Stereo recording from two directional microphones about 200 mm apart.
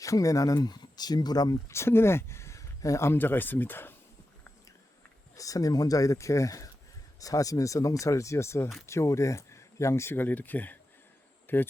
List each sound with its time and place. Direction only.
0.0 s speech: 15° left (ahead or behind)
5.4 s speech: 15° left (ahead or behind)